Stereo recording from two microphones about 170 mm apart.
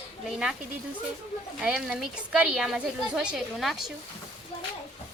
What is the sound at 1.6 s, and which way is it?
A woman's voice, 5° right (ahead or behind).